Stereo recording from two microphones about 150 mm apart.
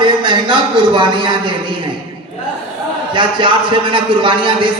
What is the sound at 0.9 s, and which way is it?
Speech, 30° right (ahead or behind).